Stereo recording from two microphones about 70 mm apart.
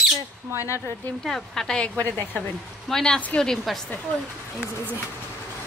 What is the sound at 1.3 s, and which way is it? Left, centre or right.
Speech, centre.